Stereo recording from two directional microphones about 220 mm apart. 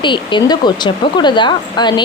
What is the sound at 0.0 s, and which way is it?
A woman's voice, 20° left (ahead or behind).